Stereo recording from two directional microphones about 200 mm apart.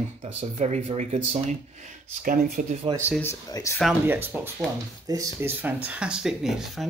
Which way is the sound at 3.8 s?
5° right (ahead or behind).